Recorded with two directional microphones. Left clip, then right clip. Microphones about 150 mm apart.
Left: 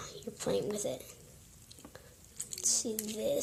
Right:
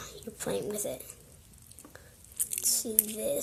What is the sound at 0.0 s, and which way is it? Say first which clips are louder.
Bird: even; 10° left (ahead or behind).